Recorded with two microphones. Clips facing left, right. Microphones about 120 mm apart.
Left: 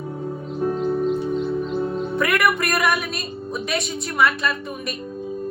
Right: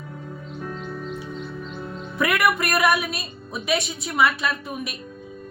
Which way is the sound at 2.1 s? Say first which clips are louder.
Even; centre (ahead or behind).